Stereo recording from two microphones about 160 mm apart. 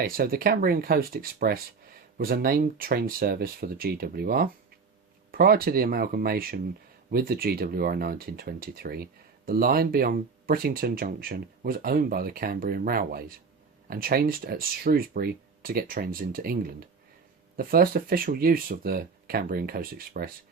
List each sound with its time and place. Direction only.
0.0 s speech: 65° right (ahead or behind)